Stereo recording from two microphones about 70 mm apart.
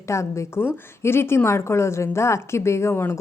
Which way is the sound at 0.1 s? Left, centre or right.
Left.